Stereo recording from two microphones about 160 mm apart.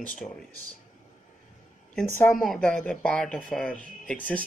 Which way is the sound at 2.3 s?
Centre (ahead or behind).